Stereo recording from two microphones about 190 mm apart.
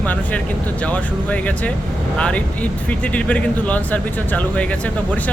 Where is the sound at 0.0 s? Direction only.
10° left (ahead or behind).